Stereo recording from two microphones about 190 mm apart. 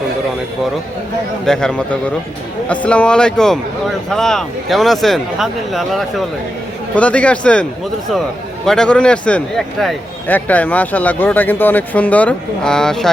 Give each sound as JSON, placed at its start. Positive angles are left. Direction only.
{"t": 1.5, "sound": "a man's voice", "side_deg": 5}